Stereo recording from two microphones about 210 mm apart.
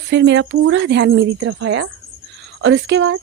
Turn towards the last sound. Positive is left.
turn(degrees=-60)  # may be behind; listen again after turning